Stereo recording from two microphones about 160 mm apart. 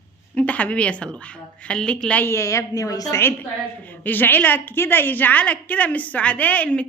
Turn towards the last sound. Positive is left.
turn(degrees=10)  # may be behind; listen again after turning